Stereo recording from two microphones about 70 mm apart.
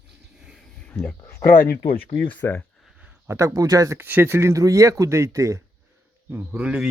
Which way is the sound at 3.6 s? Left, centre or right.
Right.